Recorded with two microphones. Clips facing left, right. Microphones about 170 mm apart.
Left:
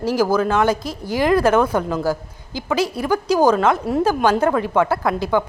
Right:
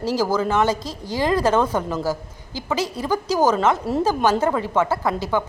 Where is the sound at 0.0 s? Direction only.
10° left (ahead or behind).